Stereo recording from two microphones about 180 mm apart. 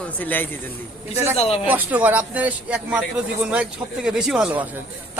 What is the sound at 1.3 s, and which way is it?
Speech, 35° left (ahead or behind).